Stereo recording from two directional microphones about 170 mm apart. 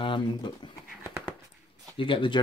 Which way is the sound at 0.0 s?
25° left (ahead or behind).